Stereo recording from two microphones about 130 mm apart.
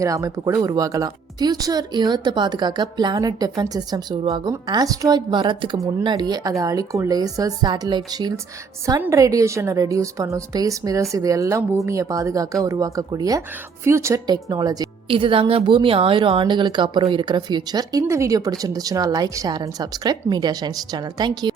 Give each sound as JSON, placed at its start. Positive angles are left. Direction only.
{"t": 0.0, "sound": "a woman's voice", "side_deg": -25}
{"t": 15.0, "sound": "a woman's voice", "side_deg": -45}